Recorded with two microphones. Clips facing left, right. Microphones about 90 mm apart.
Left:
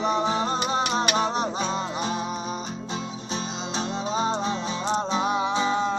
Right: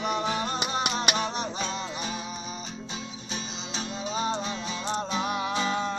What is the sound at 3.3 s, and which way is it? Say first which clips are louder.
Music: left 6 dB; 45° left (ahead or behind).